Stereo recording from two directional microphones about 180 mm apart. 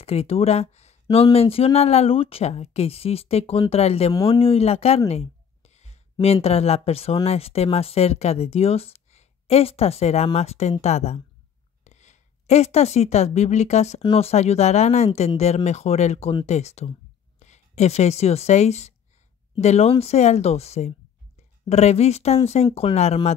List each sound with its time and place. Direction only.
0.0 s a woman's voice: 35° left (ahead or behind)